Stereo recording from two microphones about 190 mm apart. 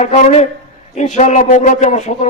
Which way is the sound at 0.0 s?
35° left (ahead or behind).